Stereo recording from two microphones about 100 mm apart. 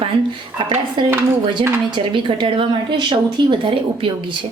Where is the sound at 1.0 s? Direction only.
50° right (ahead or behind).